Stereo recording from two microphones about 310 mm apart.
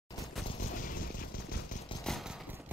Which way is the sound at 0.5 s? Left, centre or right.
Left.